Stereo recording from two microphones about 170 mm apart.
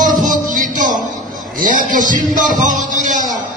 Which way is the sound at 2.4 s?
50° right (ahead or behind).